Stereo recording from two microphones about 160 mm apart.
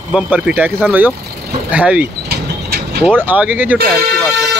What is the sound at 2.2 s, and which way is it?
Vehicle, 80° right.